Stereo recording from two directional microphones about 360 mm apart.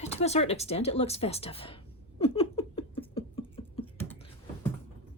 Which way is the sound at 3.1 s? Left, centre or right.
Centre.